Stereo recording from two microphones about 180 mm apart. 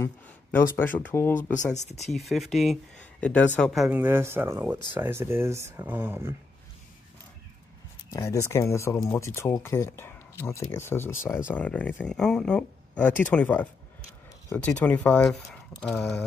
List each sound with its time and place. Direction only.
0.0 s a sound: 15° left (ahead or behind)
0.7 s speech: 10° left (ahead or behind)
1.9 s speech: 40° left (ahead or behind)
2.1 s speech: centre (ahead or behind)
8.1 s speech: 15° left (ahead or behind)